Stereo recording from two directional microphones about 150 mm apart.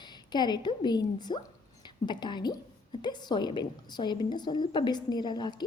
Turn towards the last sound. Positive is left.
turn(degrees=30)  # may be behind; listen again after turning